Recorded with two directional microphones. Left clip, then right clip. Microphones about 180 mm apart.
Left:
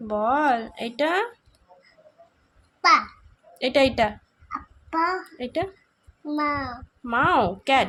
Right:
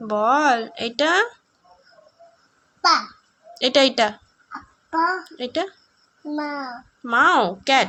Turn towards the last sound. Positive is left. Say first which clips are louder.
# right 2 dB
turn(degrees=5)  # may be behind; listen again after turning